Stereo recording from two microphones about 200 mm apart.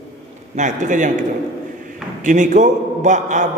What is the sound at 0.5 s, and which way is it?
Speech, 35° right (ahead or behind).